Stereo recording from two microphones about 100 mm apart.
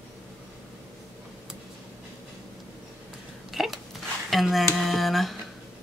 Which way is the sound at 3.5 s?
Centre (ahead or behind).